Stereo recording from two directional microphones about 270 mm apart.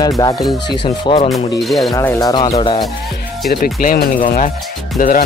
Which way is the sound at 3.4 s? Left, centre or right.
Left.